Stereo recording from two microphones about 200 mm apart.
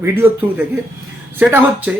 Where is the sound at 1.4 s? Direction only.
5° right (ahead or behind).